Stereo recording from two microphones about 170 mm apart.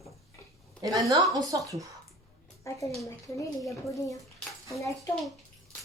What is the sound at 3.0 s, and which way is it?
Speech, 20° left (ahead or behind).